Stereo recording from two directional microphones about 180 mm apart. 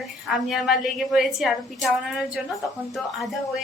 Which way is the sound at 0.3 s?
Centre (ahead or behind).